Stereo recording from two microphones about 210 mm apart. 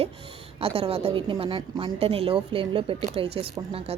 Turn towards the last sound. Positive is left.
turn(degrees=-25)  # may be behind; listen again after turning